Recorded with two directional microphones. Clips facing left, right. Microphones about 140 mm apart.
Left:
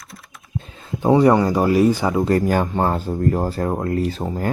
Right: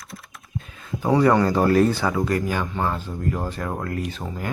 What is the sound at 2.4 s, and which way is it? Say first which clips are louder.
Speech: left 6 dB; 40° left (ahead or behind).